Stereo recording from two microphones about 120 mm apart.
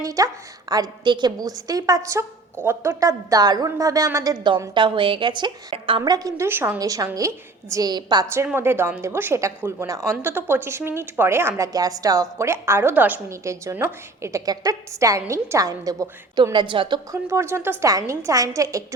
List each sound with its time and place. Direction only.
0.0 s a woman's voice: 30° right (ahead or behind); by 6.0 s 50° right (ahead or behind)
6.1 s a woman's voice: 30° right (ahead or behind)
6.7 s a woman's voice: 30° right (ahead or behind)
8.5 s a woman's voice: 20° right (ahead or behind)
13.4 s a woman's voice: 25° right (ahead or behind); by 17.0 s 40° right (ahead or behind)
17.1 s a woman's voice: 25° right (ahead or behind)